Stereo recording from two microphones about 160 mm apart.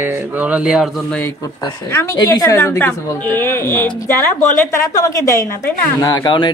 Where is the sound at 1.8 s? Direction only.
15° left (ahead or behind).